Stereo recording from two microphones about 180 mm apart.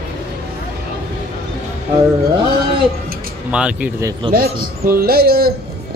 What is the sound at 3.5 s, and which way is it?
Speech, 5° right (ahead or behind).